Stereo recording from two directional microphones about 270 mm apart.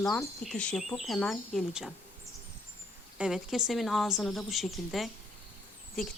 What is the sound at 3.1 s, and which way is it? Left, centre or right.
Speech, centre.